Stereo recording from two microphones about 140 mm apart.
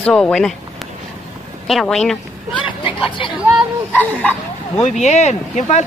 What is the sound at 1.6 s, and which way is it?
A woman's voice, centre (ahead or behind).